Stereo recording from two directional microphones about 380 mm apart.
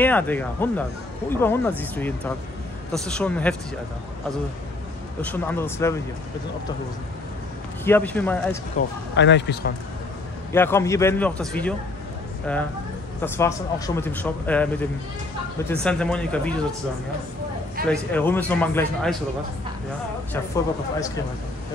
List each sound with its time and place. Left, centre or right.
0.0 s speech: centre
5.2 s speech: centre
7.8 s speech: centre
8.7 s speech: left
10.5 s speech: centre
13.2 s speech: centre
15.7 s speech: centre
17.8 s speech: centre